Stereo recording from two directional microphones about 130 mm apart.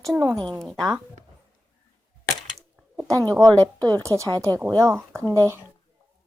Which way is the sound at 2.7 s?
5° right (ahead or behind).